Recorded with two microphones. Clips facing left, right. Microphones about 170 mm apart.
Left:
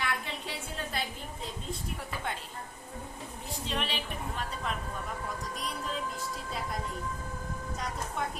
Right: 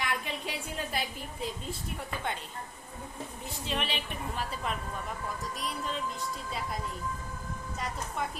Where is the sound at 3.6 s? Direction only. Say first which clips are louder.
Right 1 dB; centre (ahead or behind).